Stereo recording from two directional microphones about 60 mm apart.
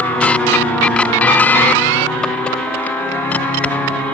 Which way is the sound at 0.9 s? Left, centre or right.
Left.